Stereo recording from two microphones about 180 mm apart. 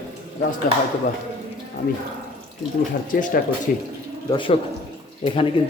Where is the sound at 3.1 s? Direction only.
50° left (ahead or behind).